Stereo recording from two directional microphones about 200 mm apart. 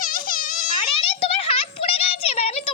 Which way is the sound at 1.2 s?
25° left (ahead or behind).